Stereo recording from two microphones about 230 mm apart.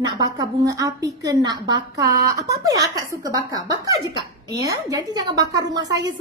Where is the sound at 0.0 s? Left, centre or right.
Centre.